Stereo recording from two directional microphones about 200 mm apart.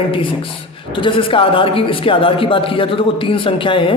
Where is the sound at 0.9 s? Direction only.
25° left (ahead or behind).